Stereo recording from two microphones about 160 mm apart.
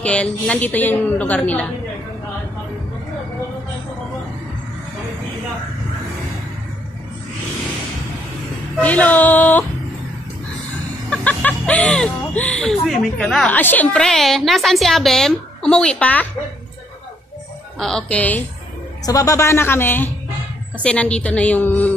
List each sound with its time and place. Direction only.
0.0 s a woman's voice: 5° left (ahead or behind)
8.8 s a woman's voice: 10° left (ahead or behind)
11.1 s speech: 10° left (ahead or behind)
17.7 s a woman's voice: 5° left (ahead or behind)
19.0 s a woman's voice: 20° left (ahead or behind)